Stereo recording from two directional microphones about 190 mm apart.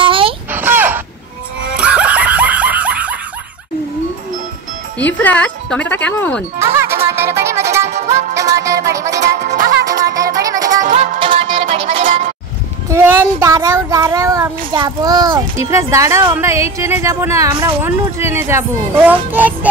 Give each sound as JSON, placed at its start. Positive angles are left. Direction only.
{"t": 0.0, "sound": "a sound", "side_deg": -25}
{"t": 0.5, "sound": "a sound", "side_deg": -10}
{"t": 1.8, "sound": "snicker", "side_deg": -5}
{"t": 4.9, "sound": "speech", "side_deg": 10}
{"t": 6.6, "sound": "music", "side_deg": -15}
{"t": 7.8, "sound": "music", "side_deg": -35}
{"t": 8.4, "sound": "music", "side_deg": -15}
{"t": 9.2, "sound": "music", "side_deg": -40}
{"t": 10.1, "sound": "music", "side_deg": -20}
{"t": 10.8, "sound": "music", "side_deg": -40}
{"t": 11.3, "sound": "music", "side_deg": -30}
{"t": 12.0, "sound": "bleat", "side_deg": -40}
{"t": 12.9, "sound": "a child's voice", "side_deg": -15}